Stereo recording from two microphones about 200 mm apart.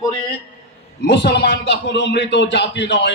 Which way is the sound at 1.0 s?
60° left (ahead or behind).